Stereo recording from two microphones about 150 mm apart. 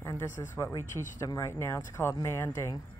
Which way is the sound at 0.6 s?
20° left (ahead or behind).